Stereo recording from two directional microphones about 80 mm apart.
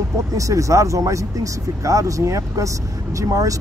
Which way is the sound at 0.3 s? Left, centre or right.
Right.